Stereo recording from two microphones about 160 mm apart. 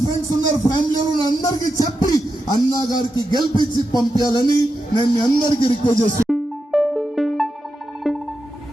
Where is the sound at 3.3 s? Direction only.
30° right (ahead or behind).